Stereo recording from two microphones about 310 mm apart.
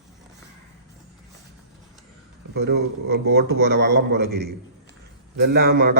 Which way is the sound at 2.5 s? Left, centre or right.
Right.